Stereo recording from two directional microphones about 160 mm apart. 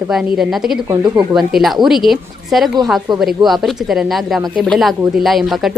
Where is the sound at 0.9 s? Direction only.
25° right (ahead or behind).